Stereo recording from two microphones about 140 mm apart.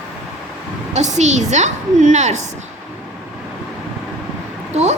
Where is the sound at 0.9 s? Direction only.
55° right (ahead or behind).